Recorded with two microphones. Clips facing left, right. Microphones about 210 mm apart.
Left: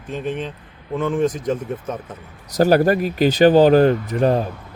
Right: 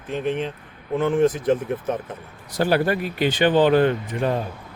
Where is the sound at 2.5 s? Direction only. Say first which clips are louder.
Left 5 dB; 40° left (ahead or behind).